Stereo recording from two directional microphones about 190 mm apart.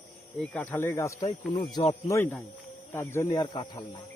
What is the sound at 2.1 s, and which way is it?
Speech, 10° left (ahead or behind).